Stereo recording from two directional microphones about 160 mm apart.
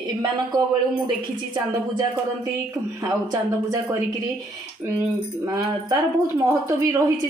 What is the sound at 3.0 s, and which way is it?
Speech, 25° right (ahead or behind).